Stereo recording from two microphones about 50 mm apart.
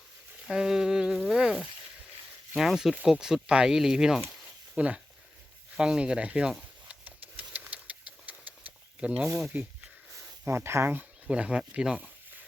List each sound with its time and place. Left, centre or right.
0.4 s a sound: centre
1.3 s frying: centre
2.6 s speech: centre
4.8 s speech: right
6.4 s a sound: centre
7.0 s a sound: right
9.5 s speech: right
10.5 s speech: right
11.3 s speech: right